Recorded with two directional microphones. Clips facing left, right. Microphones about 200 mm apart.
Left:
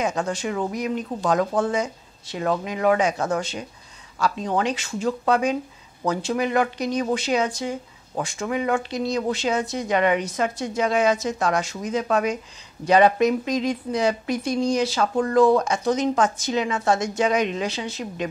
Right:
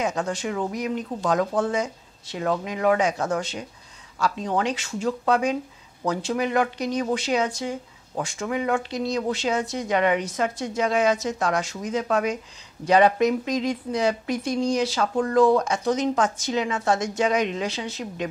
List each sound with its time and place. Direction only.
0.0 s a woman's voice: 15° left (ahead or behind)
4.5 s a woman's voice: 15° left (ahead or behind)
15.1 s speech: 20° left (ahead or behind)
16.3 s a woman's voice: 10° left (ahead or behind)